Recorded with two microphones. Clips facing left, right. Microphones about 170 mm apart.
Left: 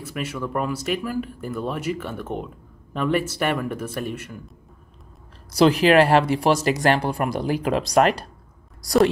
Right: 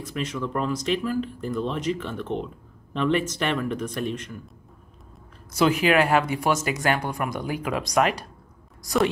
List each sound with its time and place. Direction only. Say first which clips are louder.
0.0 s speech: even; 10° left (ahead or behind)
5.5 s speech: left 4 dB; 35° left (ahead or behind)